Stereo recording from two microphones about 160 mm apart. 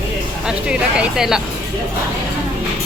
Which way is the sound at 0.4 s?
5° right (ahead or behind).